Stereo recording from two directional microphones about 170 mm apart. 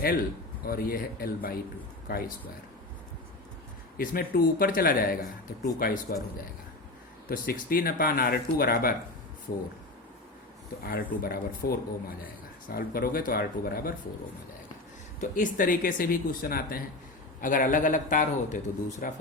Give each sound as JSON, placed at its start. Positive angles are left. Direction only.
{"t": 0.6, "sound": "speech", "side_deg": 60}
{"t": 3.9, "sound": "speech", "side_deg": 60}
{"t": 7.3, "sound": "speech", "side_deg": 60}
{"t": 10.8, "sound": "speech", "side_deg": 60}
{"t": 15.2, "sound": "a man's voice", "side_deg": 50}